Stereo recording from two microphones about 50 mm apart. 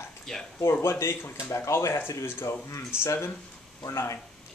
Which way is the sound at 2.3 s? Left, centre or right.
Left.